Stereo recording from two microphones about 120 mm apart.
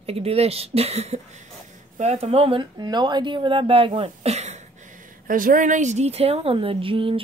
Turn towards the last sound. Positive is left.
turn(degrees=-50)  # may be behind; listen again after turning